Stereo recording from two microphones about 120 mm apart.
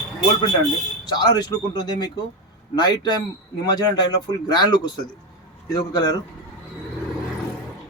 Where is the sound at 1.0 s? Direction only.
35° left (ahead or behind).